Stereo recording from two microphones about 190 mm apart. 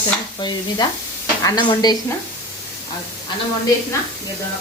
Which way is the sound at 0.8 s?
25° left (ahead or behind).